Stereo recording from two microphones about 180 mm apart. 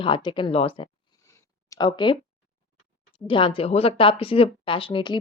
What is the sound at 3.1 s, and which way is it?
Speech, 30° left (ahead or behind).